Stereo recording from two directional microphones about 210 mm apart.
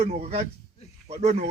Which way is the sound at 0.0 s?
30° right (ahead or behind).